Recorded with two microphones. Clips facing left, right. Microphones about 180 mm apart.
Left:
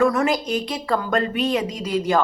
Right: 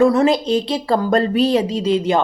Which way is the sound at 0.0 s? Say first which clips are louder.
Right 5 dB; 30° right (ahead or behind).